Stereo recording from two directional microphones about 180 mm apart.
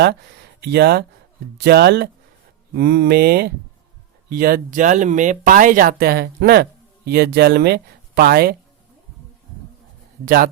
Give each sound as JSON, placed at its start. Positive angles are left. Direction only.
{"t": 0.6, "sound": "speech", "side_deg": -60}
{"t": 10.2, "sound": "speech", "side_deg": -50}